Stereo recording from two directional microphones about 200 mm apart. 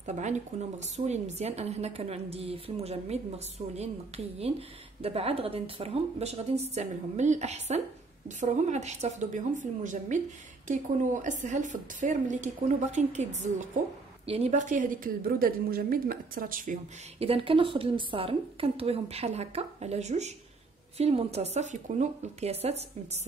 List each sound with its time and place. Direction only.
0.0 s a woman's voice: 35° right (ahead or behind)
11.2 s a woman's voice: 40° right (ahead or behind)
17.2 s a woman's voice: 30° right (ahead or behind)